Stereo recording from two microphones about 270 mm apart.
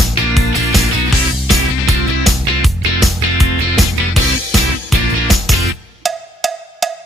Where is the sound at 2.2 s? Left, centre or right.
Centre.